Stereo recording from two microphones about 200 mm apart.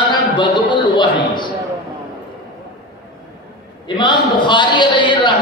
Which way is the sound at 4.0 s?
25° left (ahead or behind).